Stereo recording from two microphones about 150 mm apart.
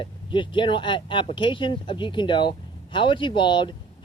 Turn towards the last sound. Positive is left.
turn(degrees=30)  # may be behind; listen again after turning